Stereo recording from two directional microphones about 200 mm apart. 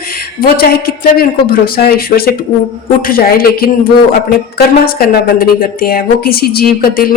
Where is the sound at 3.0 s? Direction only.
45° left (ahead or behind).